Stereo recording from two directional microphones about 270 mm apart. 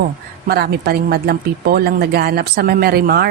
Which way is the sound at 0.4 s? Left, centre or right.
Right.